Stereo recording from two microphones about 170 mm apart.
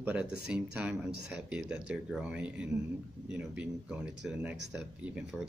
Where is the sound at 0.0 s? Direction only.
10° right (ahead or behind).